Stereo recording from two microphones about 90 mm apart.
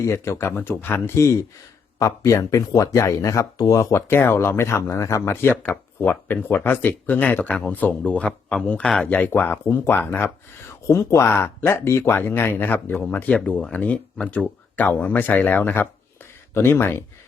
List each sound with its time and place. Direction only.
0.0 s speech: 30° left (ahead or behind)
10.8 s speech: 35° left (ahead or behind)